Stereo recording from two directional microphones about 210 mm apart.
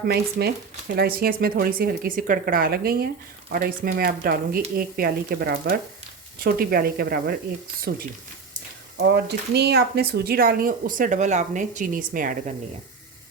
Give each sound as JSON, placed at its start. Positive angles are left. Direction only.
{"t": 0.1, "sound": "speech", "side_deg": -50}
{"t": 9.0, "sound": "speech", "side_deg": -55}